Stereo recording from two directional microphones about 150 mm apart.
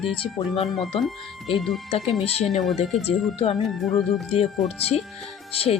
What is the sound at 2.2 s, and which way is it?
Speech, 45° left (ahead or behind).